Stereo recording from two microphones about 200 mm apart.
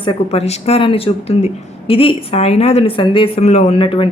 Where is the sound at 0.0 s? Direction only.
25° left (ahead or behind).